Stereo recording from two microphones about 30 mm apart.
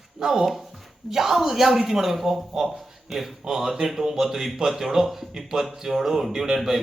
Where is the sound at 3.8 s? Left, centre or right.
Centre.